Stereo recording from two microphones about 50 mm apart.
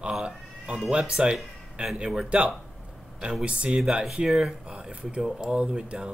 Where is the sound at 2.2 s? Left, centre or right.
Right.